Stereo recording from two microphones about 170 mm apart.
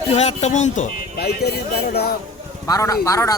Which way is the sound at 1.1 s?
70° left (ahead or behind).